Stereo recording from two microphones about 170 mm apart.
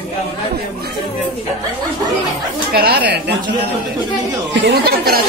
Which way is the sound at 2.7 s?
75° right (ahead or behind).